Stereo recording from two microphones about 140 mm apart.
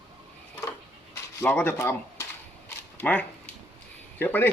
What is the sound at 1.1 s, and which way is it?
Speech, 15° left (ahead or behind).